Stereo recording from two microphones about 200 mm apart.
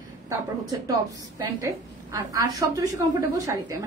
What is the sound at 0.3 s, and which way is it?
Speech, 20° right (ahead or behind).